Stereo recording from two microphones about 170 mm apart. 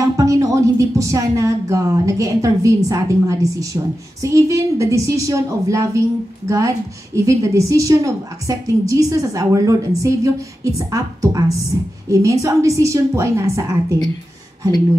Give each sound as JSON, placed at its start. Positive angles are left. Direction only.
{"t": 0.0, "sound": "a woman's voice", "side_deg": -20}